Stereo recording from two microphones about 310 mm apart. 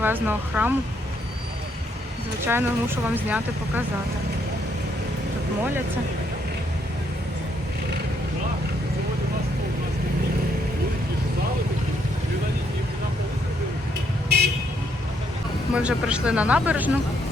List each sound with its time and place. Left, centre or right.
0.0 s speech: centre
2.5 s speech: centre
14.3 s vehicle: right
15.7 s speech: centre